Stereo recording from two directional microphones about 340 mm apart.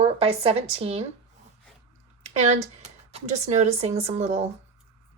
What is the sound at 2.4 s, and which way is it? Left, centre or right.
A woman's voice, centre.